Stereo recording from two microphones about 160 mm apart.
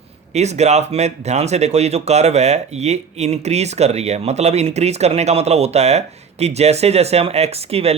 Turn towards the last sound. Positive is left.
turn(degrees=-40)  # may be behind; listen again after turning